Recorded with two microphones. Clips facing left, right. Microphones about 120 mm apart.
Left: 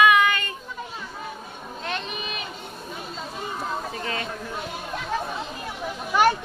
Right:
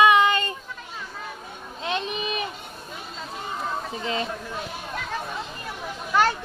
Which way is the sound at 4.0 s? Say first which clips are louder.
Right 2 dB; 20° right (ahead or behind).